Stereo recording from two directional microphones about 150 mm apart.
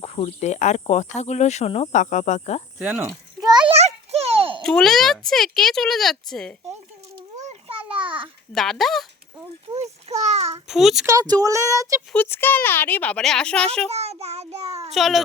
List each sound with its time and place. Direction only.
0.0 s speech: 45° left (ahead or behind)
2.7 s speech: 10° right (ahead or behind)
3.1 s a sound: 25° right (ahead or behind)
3.8 s a sound: 45° right (ahead or behind)
4.6 s speech: 5° left (ahead or behind)
7.4 s a sound: 35° right (ahead or behind)
8.5 s speech: centre (ahead or behind)
9.7 s a sound: 45° right (ahead or behind)
10.7 s speech: centre (ahead or behind)
11.0 s speech: 25° right (ahead or behind)
12.1 s speech: 15° left (ahead or behind)
13.9 s child singing: 45° right (ahead or behind)
14.9 s speech: centre (ahead or behind)